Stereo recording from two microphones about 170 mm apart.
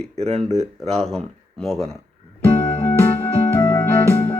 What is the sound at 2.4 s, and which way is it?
Music, 10° left (ahead or behind).